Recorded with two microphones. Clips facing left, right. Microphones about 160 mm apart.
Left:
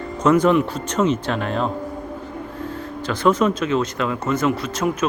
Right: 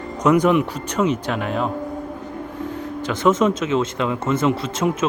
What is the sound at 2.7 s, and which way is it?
Speech, 20° right (ahead or behind).